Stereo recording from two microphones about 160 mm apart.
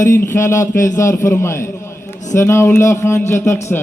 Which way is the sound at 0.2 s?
15° left (ahead or behind).